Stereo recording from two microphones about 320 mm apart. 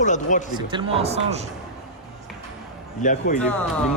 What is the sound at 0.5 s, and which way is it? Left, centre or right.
Speech, centre.